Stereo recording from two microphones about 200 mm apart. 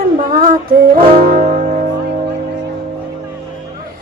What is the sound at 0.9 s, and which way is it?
Brass instrument, 45° right (ahead or behind).